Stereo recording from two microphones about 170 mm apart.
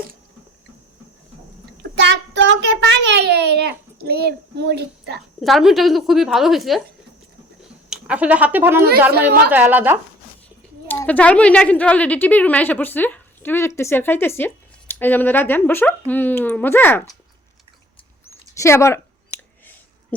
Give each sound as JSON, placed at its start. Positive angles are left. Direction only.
{"t": 2.0, "sound": "child singing", "side_deg": -90}
{"t": 5.4, "sound": "a woman's voice", "side_deg": 0}
{"t": 7.9, "sound": "speech", "side_deg": -5}
{"t": 10.8, "sound": "a woman's voice", "side_deg": 10}
{"t": 18.3, "sound": "a sound", "side_deg": 15}